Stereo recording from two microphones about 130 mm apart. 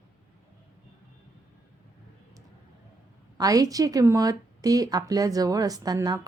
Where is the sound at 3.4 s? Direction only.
30° right (ahead or behind).